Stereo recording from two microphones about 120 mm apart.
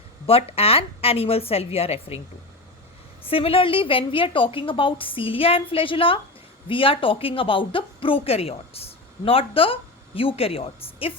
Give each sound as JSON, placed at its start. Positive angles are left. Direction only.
{"t": 0.3, "sound": "a woman's voice", "side_deg": 55}
{"t": 3.2, "sound": "a woman's voice", "side_deg": 50}